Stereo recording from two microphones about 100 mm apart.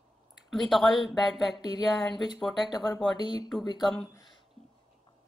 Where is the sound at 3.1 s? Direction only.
45° left (ahead or behind).